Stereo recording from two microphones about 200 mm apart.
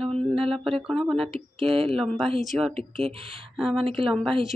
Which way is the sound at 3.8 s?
30° right (ahead or behind).